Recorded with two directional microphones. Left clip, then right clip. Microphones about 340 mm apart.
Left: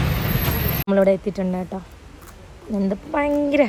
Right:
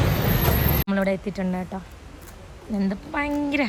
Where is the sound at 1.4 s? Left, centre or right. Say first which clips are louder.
Left 3 dB; right.